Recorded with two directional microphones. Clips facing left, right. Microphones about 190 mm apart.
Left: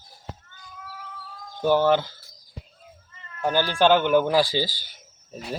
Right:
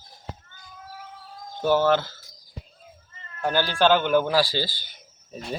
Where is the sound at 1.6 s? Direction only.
15° left (ahead or behind).